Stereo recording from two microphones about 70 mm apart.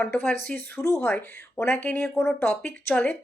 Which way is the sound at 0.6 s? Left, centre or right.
Left.